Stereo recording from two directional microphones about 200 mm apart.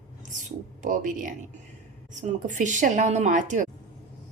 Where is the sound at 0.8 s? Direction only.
40° right (ahead or behind).